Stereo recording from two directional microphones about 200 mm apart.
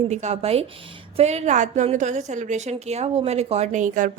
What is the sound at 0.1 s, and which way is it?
A woman's voice, 35° right (ahead or behind).